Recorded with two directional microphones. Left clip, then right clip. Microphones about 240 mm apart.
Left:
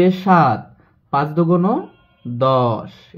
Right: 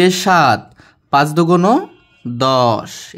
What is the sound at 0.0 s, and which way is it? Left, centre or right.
Speech, right.